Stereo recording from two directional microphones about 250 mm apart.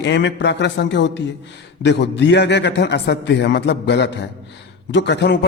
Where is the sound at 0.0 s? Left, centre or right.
Left.